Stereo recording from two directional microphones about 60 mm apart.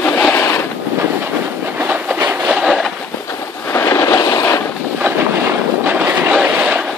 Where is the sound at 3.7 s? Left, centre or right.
Left.